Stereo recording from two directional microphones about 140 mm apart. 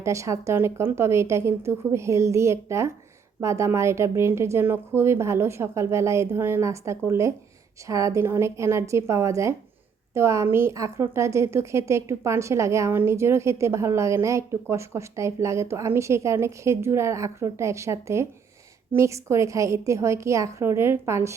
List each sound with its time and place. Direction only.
0.0 s a woman's voice: 20° right (ahead or behind)